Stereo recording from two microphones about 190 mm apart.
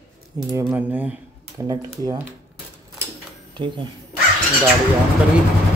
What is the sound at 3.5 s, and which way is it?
Speech, 25° right (ahead or behind).